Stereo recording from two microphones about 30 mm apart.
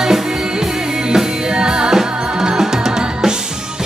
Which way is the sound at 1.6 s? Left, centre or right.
Right.